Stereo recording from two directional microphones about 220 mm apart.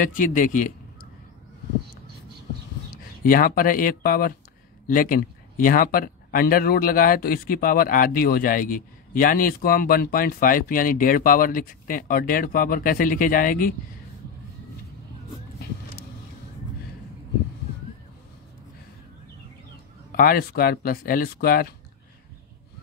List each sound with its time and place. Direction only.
0.0 s speech: 35° left (ahead or behind)
3.3 s speech: 40° left (ahead or behind)
20.1 s speech: 45° left (ahead or behind)